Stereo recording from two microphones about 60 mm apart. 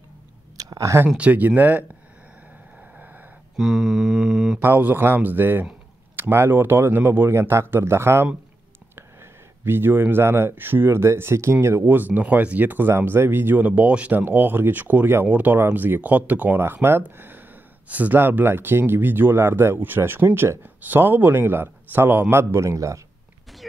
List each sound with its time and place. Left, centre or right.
0.6 s a sound: right
1.0 s speech: right
3.5 s mantra: centre
4.6 s speech: right
7.2 s speech: right
11.9 s speech: right
22.7 s speech: right